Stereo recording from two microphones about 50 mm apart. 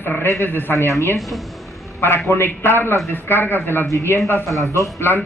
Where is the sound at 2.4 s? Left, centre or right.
Left.